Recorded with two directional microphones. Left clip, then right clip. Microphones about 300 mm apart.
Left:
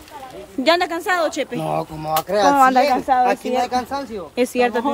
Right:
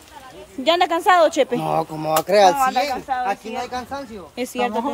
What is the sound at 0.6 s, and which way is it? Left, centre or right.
A woman's voice, centre.